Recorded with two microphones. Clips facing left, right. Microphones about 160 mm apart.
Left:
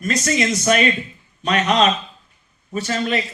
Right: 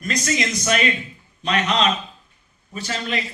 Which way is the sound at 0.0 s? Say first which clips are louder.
Left 4 dB; 40° left (ahead or behind).